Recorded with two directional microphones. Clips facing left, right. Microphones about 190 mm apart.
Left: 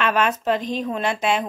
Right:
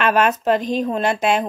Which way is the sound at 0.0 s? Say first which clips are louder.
Right 4 dB; 50° right (ahead or behind).